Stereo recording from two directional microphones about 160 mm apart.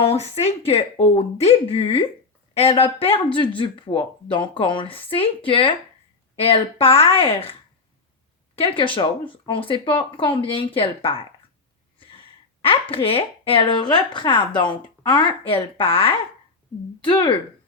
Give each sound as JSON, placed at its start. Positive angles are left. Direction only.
{"t": 0.1, "sound": "speech", "side_deg": 40}
{"t": 8.5, "sound": "speech", "side_deg": 35}